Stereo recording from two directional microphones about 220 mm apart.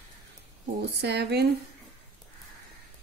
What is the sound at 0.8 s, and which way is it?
Speech, 50° right (ahead or behind).